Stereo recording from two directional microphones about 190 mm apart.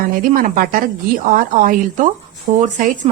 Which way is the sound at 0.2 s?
45° right (ahead or behind).